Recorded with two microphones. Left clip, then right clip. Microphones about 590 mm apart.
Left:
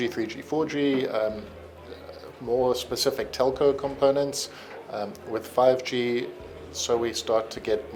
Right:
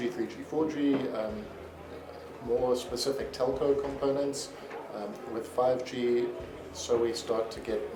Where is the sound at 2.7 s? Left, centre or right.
Left.